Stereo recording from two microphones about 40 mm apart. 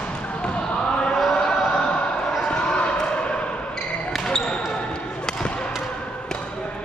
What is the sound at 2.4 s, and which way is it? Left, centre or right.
Basketball bounce, left.